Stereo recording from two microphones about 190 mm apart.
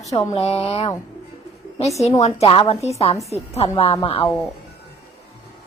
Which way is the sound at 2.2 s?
30° left (ahead or behind).